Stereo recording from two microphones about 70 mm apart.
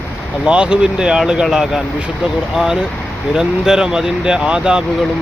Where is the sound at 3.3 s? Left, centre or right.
Centre.